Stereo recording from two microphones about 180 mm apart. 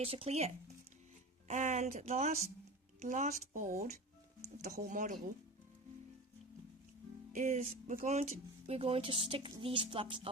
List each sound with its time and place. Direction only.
0.0 s speech: 35° right (ahead or behind)
7.3 s speech: 45° right (ahead or behind)